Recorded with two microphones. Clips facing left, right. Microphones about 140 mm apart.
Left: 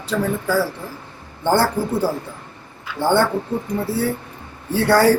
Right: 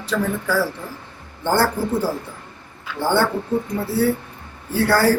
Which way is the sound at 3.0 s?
15° left (ahead or behind).